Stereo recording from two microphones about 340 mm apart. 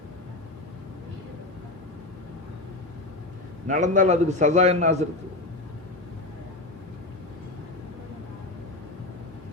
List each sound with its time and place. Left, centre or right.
3.7 s a man's voice: right